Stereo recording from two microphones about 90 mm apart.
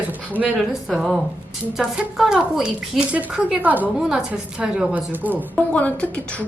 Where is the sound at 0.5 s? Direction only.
5° right (ahead or behind).